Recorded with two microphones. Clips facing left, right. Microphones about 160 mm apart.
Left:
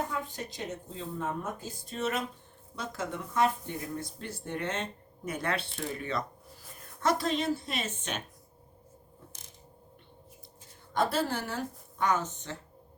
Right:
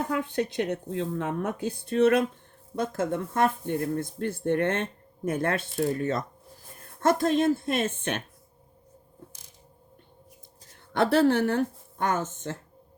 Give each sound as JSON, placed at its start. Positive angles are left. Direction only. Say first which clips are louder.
{"t": 0.1, "sound": "speech", "louder": "right 9 dB", "side_deg": -65}
{"t": 10.9, "sound": "speech", "louder": "right 8 dB", "side_deg": -65}